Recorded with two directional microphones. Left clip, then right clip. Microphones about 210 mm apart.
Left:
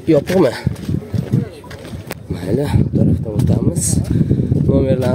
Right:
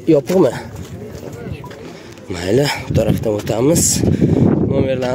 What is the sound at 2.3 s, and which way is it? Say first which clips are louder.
Speech: right 4 dB; centre (ahead or behind).